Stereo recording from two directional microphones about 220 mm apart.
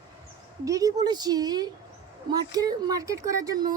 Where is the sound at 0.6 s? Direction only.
15° right (ahead or behind).